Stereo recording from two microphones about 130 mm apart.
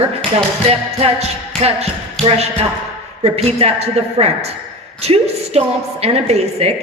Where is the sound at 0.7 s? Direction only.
50° right (ahead or behind).